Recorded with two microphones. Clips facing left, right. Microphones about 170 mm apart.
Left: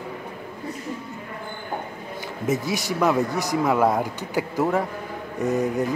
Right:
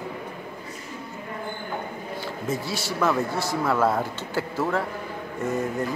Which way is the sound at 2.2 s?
20° left (ahead or behind).